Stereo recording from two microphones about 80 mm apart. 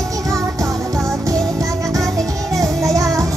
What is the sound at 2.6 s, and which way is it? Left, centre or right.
Music, right.